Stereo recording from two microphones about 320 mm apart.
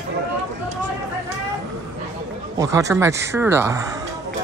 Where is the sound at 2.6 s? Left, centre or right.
Centre.